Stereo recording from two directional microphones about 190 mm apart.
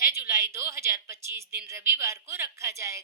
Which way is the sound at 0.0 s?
15° right (ahead or behind).